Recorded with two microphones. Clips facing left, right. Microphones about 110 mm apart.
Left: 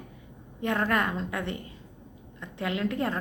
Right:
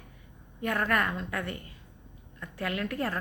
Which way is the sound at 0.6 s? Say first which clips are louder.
Left 2 dB; 25° left (ahead or behind).